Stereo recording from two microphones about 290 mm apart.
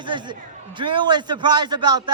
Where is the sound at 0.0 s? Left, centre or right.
Centre.